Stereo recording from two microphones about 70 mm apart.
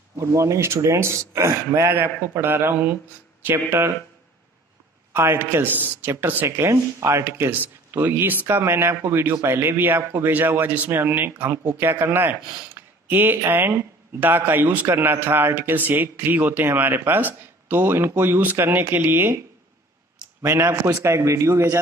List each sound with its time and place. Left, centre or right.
0.3 s a man's voice: right
5.1 s a man's voice: right
6.4 s a man's voice: right
20.4 s a man's voice: right